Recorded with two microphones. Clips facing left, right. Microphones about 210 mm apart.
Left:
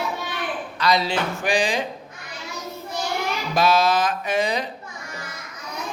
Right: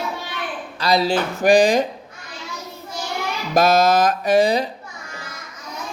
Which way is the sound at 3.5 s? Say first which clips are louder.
Right 4 dB; 45° right (ahead or behind).